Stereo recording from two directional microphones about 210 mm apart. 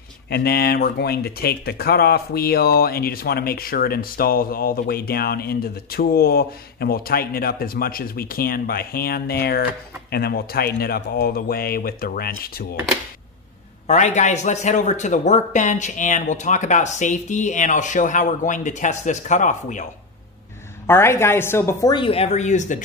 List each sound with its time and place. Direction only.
0.3 s speech: 50° left (ahead or behind)
13.8 s a man's voice: 35° left (ahead or behind)
20.8 s a woman's voice: 10° left (ahead or behind); by 22.8 s 35° left (ahead or behind)